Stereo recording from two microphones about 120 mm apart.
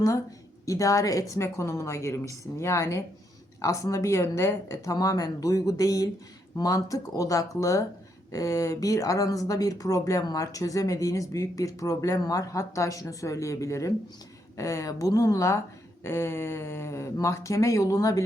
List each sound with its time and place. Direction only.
0.6 s speech: 30° left (ahead or behind)